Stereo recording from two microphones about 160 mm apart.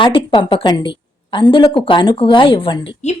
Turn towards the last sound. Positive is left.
turn(degrees=40)  # may be behind; listen again after turning